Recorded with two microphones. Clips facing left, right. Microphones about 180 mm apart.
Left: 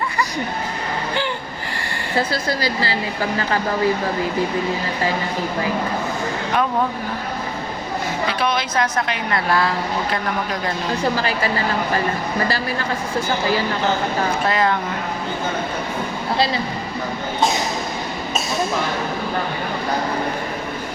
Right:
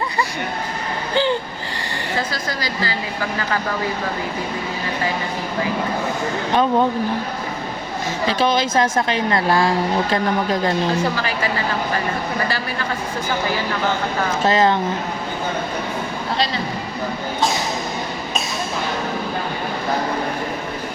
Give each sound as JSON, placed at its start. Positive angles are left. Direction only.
{"t": 8.4, "sound": "speech", "side_deg": -25}
{"t": 14.4, "sound": "speech", "side_deg": -25}